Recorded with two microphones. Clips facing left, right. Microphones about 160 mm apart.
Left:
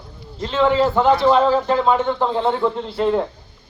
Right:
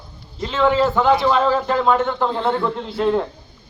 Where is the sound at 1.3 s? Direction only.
20° left (ahead or behind).